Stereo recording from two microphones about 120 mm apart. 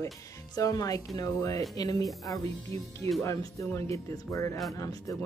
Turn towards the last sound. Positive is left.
turn(degrees=25)  # may be behind; listen again after turning